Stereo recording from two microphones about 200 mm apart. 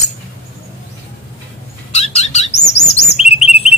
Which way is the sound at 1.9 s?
30° left (ahead or behind).